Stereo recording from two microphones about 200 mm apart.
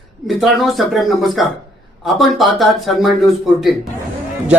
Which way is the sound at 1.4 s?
Centre (ahead or behind).